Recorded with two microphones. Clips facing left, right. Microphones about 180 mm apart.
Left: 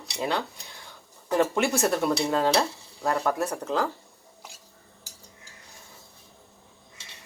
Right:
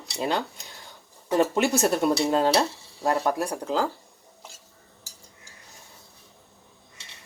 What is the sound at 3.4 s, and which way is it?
Speech, 15° right (ahead or behind).